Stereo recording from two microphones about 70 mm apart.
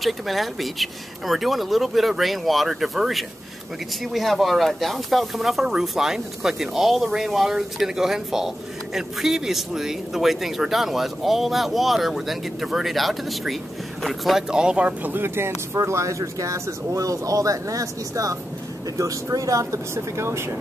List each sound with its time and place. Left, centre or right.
0.0 s speech: centre
14.5 s speech: centre; by 20.5 s right